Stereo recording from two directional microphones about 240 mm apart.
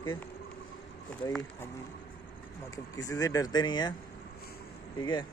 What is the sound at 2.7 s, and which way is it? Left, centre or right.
Speech, centre.